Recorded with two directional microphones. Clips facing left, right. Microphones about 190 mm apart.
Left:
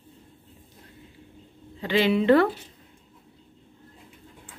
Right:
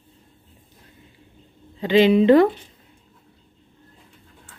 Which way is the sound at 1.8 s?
20° right (ahead or behind).